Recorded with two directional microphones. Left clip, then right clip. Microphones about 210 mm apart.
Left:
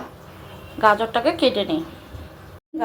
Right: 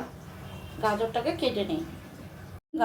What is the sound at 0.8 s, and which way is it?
Speech, 20° left (ahead or behind).